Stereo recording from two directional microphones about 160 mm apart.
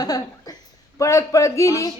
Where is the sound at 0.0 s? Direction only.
25° left (ahead or behind).